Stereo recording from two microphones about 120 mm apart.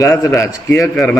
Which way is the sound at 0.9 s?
10° left (ahead or behind).